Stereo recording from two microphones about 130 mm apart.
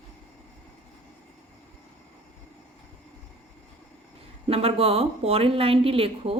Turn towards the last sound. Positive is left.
turn(degrees=-45)  # may be behind; listen again after turning